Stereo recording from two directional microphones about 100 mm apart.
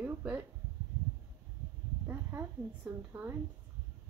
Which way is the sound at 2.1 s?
25° right (ahead or behind).